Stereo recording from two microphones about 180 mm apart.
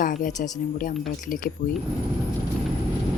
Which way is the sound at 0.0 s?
45° left (ahead or behind).